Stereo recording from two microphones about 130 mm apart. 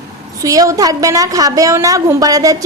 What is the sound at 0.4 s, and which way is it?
A woman's voice, 25° right (ahead or behind).